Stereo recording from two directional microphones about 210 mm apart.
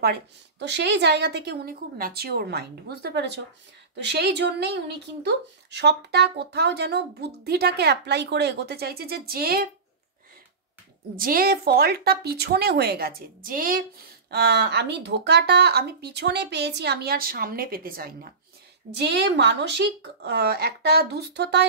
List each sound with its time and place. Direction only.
0.0 s speech: 50° right (ahead or behind)
11.1 s speech: 45° right (ahead or behind)